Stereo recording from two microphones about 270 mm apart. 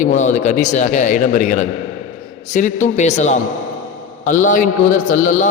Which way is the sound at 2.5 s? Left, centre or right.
Left.